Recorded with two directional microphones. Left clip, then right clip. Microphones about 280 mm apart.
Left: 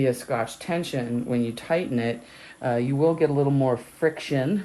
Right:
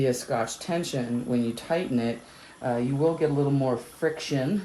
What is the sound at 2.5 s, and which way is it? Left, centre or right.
Speech, left.